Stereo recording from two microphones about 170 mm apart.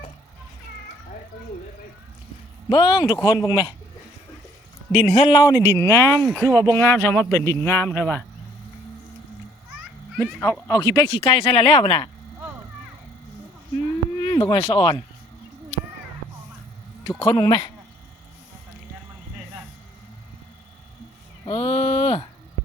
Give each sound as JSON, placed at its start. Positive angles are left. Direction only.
{"t": 2.6, "sound": "speech", "side_deg": 25}
{"t": 4.9, "sound": "speech", "side_deg": 10}
{"t": 5.1, "sound": "speech", "side_deg": 25}
{"t": 10.2, "sound": "speech", "side_deg": 15}
{"t": 11.2, "sound": "speech", "side_deg": 35}
{"t": 14.2, "sound": "speech", "side_deg": 20}
{"t": 17.1, "sound": "speech", "side_deg": 25}
{"t": 21.4, "sound": "a sound", "side_deg": 30}